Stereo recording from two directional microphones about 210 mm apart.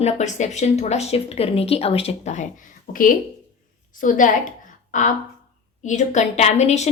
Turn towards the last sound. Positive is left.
turn(degrees=30)  # may be behind; listen again after turning